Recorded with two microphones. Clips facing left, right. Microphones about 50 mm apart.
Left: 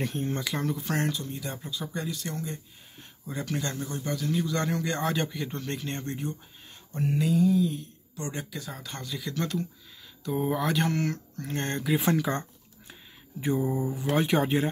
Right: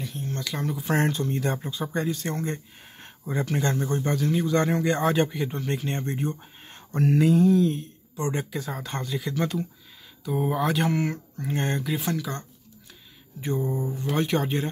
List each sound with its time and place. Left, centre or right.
0.0 s speech: left
0.3 s speech: centre
0.6 s speech: centre
0.8 s speech: right
2.4 s speech: right
3.3 s speech: right
6.7 s speech: right
7.7 s speech: right; by 9.7 s centre
10.2 s speech: centre
12.0 s speech: left
13.4 s speech: centre